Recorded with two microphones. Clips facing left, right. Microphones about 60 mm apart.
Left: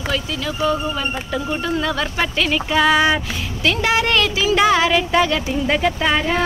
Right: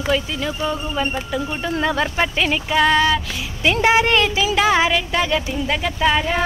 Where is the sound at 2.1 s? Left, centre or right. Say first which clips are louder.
Even; centre.